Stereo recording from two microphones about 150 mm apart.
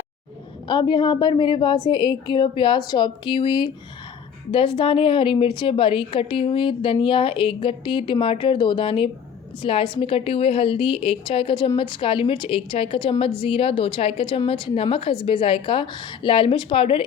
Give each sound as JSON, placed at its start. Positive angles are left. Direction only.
{"t": 0.7, "sound": "a woman's voice", "side_deg": 30}